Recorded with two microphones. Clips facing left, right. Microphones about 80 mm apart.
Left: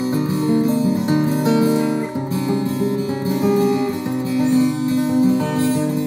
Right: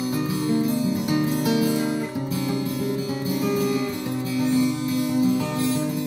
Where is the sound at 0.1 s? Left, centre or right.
Left.